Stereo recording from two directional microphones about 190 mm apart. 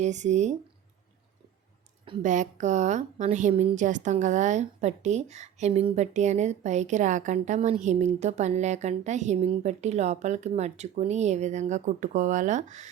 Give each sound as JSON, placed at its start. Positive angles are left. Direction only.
{"t": 0.0, "sound": "a woman's voice", "side_deg": -40}
{"t": 2.2, "sound": "a woman's voice", "side_deg": -40}